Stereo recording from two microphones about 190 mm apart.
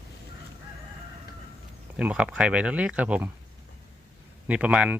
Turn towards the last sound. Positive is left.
turn(degrees=-5)  # may be behind; listen again after turning